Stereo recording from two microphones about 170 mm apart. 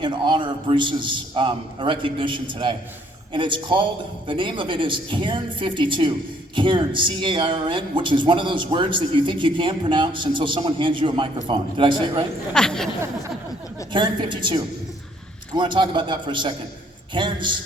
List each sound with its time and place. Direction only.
0.0 s speech: 30° right (ahead or behind)
12.5 s speech: 5° left (ahead or behind)
13.9 s speech: 25° right (ahead or behind)